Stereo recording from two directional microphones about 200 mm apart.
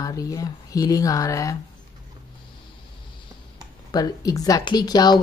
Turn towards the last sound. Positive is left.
turn(degrees=20)  # may be behind; listen again after turning